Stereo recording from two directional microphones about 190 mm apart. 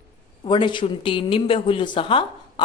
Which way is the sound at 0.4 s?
25° left (ahead or behind).